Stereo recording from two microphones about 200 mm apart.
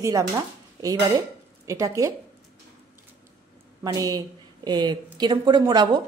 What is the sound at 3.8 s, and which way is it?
A woman's voice, 20° right (ahead or behind).